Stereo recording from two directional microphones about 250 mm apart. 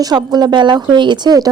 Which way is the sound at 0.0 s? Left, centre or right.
Centre.